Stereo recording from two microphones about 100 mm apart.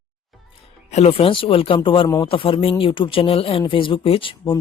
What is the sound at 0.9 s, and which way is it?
Speech, 85° left.